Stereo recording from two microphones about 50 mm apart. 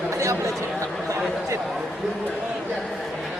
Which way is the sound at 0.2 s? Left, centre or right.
Right.